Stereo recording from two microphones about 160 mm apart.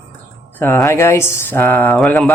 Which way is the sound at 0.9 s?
15° left (ahead or behind).